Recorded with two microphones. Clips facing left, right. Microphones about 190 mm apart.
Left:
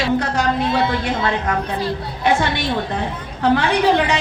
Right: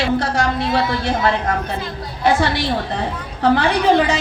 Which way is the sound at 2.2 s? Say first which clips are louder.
Right 2 dB; 35° right (ahead or behind).